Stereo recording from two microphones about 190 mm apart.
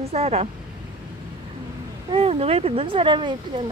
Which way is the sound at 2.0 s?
30° right (ahead or behind).